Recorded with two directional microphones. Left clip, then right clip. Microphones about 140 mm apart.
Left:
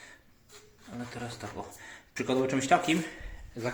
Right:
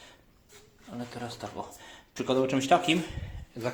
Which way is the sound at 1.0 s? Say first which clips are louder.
Right 1 dB; 10° right (ahead or behind).